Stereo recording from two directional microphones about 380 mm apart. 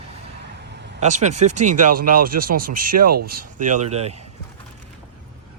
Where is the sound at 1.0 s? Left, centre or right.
Centre.